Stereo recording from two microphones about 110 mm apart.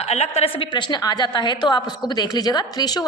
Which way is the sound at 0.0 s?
75° left (ahead or behind).